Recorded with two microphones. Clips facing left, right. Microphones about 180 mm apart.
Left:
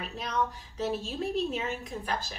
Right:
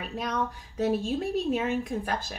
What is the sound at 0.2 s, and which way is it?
A woman's voice, 50° right (ahead or behind).